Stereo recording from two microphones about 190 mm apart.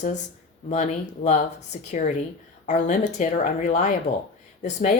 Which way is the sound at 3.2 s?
40° left (ahead or behind).